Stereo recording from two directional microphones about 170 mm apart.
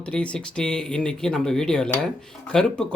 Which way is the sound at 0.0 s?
5° left (ahead or behind).